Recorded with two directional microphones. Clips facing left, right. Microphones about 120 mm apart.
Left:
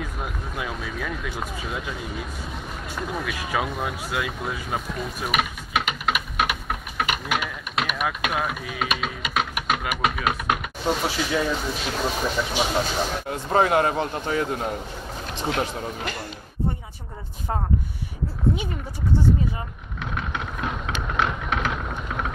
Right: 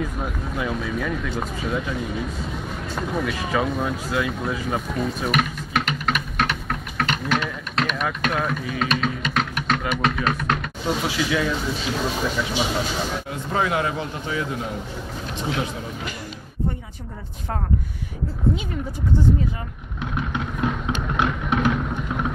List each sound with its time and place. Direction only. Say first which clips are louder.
0.2 s speech: right 4 dB; 5° left (ahead or behind)
3.5 s a sound: right 3 dB; 10° left (ahead or behind)
11.1 s speech: right 1 dB; 35° left (ahead or behind)
11.7 s speech: right 1 dB; 15° left (ahead or behind)
13.3 s a man's voice: left 5 dB; 45° left (ahead or behind)
20.8 s a sound: right 2 dB; 10° right (ahead or behind)